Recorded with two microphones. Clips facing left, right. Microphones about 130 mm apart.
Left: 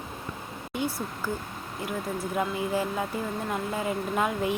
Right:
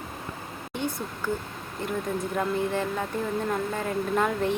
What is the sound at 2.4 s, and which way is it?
Speech, 10° left (ahead or behind).